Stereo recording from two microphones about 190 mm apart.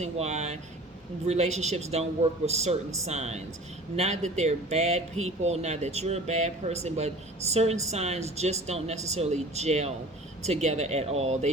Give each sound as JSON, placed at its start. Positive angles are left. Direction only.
{"t": 0.0, "sound": "speech", "side_deg": -35}